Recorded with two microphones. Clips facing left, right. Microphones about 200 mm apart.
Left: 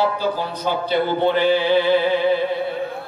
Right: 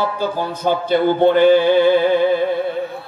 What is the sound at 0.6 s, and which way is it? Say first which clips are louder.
A man's voice: right 6 dB; 50° right (ahead or behind).